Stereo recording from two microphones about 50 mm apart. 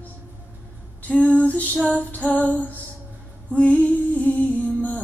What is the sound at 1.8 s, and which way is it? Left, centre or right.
Female singing, left.